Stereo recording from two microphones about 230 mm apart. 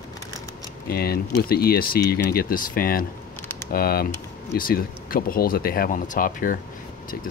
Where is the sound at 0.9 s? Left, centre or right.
Left.